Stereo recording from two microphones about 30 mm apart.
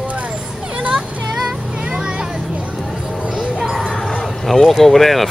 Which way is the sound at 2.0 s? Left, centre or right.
Right.